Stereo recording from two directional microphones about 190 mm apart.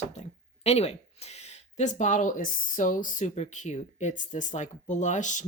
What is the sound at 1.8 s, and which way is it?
Speech, 40° left (ahead or behind).